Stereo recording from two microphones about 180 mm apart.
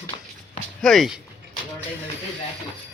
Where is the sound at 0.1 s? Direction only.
30° left (ahead or behind).